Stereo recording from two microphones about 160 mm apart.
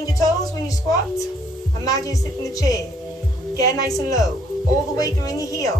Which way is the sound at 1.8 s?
20° left (ahead or behind).